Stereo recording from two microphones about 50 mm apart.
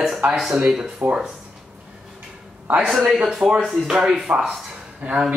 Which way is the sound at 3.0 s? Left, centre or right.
Centre.